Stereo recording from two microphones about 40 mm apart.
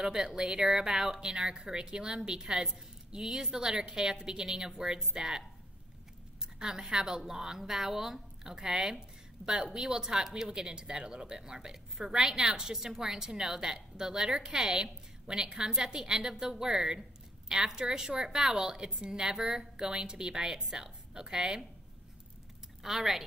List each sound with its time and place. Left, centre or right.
0.0 s speech: centre
6.4 s a woman's voice: centre
22.8 s speech: centre